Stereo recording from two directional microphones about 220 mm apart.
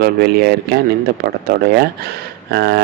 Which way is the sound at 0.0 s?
45° right (ahead or behind).